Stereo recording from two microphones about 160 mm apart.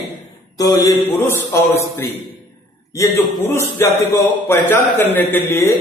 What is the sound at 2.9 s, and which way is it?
A man's voice, 20° left (ahead or behind).